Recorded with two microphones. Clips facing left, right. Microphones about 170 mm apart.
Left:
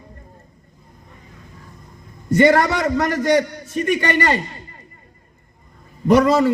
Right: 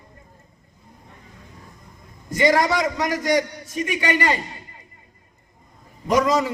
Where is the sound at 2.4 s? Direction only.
60° left (ahead or behind).